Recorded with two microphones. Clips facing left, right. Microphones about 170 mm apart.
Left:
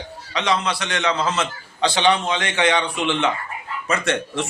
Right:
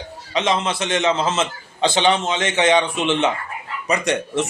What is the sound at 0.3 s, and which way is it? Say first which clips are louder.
A man's voice: right 2 dB; 20° right (ahead or behind).